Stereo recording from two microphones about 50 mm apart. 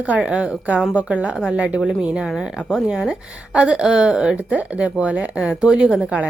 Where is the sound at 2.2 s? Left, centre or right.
Centre.